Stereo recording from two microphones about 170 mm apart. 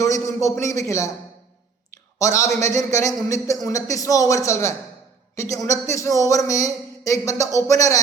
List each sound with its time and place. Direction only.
0.0 s a man's voice: 20° left (ahead or behind)
2.1 s a man's voice: 20° left (ahead or behind)